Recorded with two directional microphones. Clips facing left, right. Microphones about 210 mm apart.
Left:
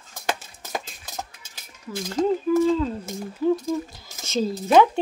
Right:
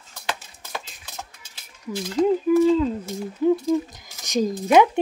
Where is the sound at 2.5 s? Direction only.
15° right (ahead or behind).